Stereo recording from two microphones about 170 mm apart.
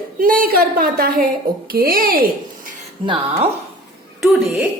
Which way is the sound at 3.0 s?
35° right (ahead or behind).